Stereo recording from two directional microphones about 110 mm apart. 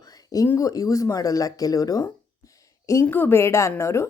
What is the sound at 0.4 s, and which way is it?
A woman's voice, 30° left (ahead or behind).